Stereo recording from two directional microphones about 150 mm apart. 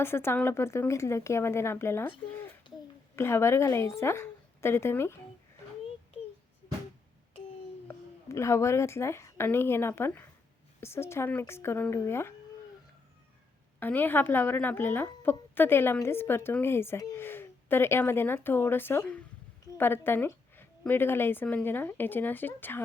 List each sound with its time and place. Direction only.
0.0 s a woman's voice: 15° left (ahead or behind)
7.9 s a woman's voice: 20° left (ahead or behind)
13.7 s a woman's voice: 10° left (ahead or behind)